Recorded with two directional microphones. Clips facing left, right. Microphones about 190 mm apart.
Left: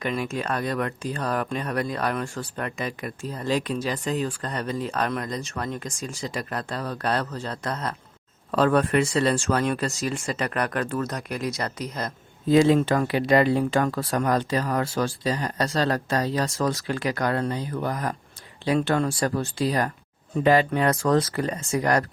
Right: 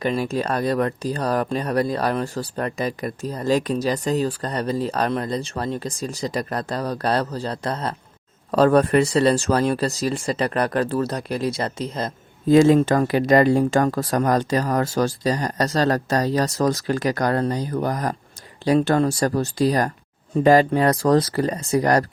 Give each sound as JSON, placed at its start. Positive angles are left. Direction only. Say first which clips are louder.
{"t": 0.0, "sound": "speech", "louder": "right 5 dB", "side_deg": -35}
{"t": 12.5, "sound": "speech", "louder": "right 4 dB", "side_deg": -45}